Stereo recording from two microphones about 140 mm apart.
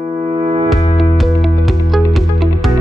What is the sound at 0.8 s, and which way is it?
Music, 40° left (ahead or behind).